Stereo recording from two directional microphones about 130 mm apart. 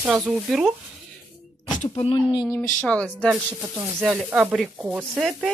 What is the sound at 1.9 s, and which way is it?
Speech, 45° left (ahead or behind).